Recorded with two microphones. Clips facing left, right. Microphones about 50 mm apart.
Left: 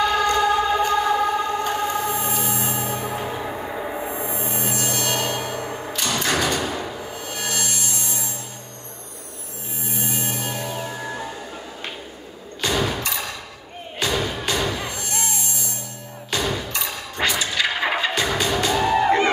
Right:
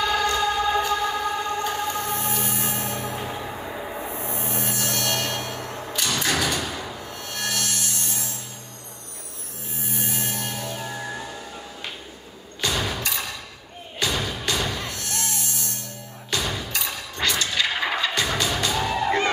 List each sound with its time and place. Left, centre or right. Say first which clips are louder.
0.0 s a sound: left 3 dB; centre
4.1 s music: left 3 dB; centre
9.8 s music: left 2 dB; centre
12.6 s thump: left 3 dB; centre
13.9 s music: left 3 dB; centre
16.3 s music: left 3 dB; centre
17.2 s a sound: left 2 dB; centre
17.8 s music: left 3 dB; centre
18.1 s music: left 3 dB; centre
19.0 s music: left 1 dB; centre